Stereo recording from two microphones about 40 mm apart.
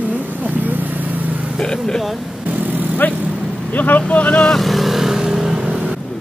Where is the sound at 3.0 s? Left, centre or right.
Left.